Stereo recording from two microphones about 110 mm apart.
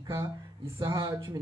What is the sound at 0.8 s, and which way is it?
Speech, 35° right (ahead or behind).